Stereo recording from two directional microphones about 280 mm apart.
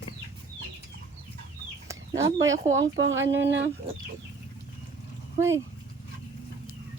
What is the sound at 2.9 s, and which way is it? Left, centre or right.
Speech, right.